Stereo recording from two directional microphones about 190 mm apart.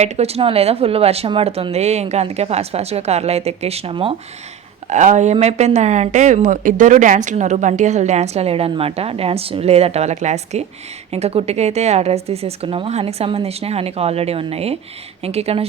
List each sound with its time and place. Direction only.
0.0 s speech: 35° right (ahead or behind)